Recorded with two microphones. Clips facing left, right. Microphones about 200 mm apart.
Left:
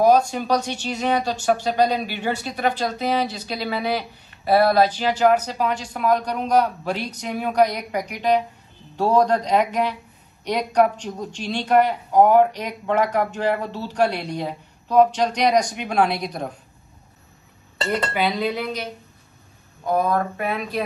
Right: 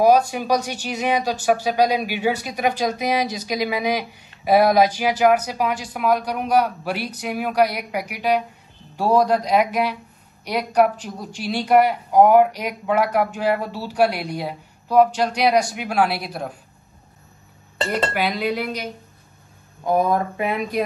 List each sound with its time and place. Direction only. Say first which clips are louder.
0.3 s speech: right 1 dB; 10° right (ahead or behind)
18.1 s speech: even; 10° right (ahead or behind)
19.9 s speech: right 2 dB; 20° right (ahead or behind)